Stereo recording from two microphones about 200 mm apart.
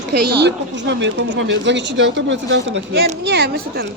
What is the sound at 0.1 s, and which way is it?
A woman's voice, 55° right (ahead or behind).